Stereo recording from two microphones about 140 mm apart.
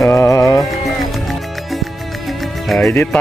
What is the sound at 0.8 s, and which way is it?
Music, centre (ahead or behind).